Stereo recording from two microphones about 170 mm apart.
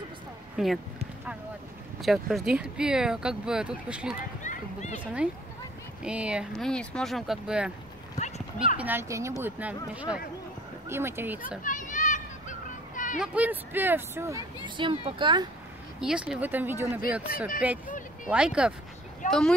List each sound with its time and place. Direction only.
0.6 s speech: 5° right (ahead or behind)
2.0 s speech: centre (ahead or behind)
4.4 s a sound: 45° left (ahead or behind)
5.0 s speech: 5° right (ahead or behind)
6.7 s speech: 5° left (ahead or behind)
8.2 s clip-clop: 40° left (ahead or behind)
8.7 s speech: 10° right (ahead or behind)
11.6 s children playing: 50° left (ahead or behind)
13.2 s speech: 10° right (ahead or behind); by 15.4 s 30° right (ahead or behind)
16.0 s speech: 5° right (ahead or behind)
17.8 s a sound: 50° left (ahead or behind)
18.3 s speech: 5° right (ahead or behind)
19.2 s speech: 50° left (ahead or behind)